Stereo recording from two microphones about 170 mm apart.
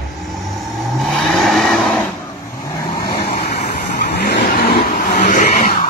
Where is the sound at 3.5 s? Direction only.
70° left (ahead or behind).